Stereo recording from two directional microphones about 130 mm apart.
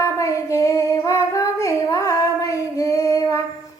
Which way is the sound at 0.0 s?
20° left (ahead or behind).